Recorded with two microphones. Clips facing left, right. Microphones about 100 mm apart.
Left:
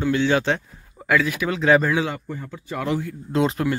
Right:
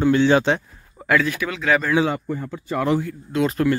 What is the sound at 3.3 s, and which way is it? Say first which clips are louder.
Speech: left 1 dB; 25° left (ahead or behind).